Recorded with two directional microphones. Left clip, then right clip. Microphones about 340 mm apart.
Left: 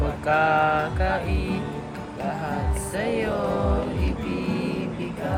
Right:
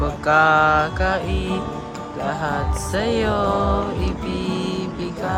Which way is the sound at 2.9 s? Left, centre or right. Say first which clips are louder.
Right 5 dB; centre.